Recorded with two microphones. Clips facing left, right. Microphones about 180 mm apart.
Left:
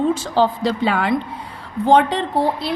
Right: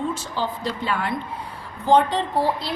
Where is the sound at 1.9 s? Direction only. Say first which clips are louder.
Left 3 dB; 80° left.